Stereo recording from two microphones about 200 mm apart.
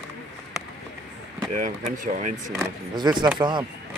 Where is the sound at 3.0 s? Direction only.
20° right (ahead or behind).